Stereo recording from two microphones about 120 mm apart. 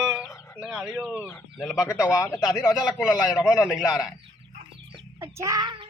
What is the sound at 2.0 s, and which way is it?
Speech, 25° left (ahead or behind).